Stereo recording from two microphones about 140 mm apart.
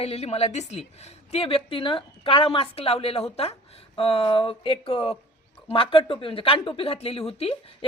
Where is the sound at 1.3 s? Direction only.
40° left (ahead or behind).